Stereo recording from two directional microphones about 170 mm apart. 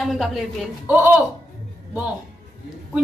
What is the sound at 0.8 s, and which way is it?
Speech, 10° right (ahead or behind).